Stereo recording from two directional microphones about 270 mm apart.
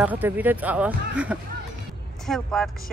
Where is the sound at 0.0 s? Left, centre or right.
Centre.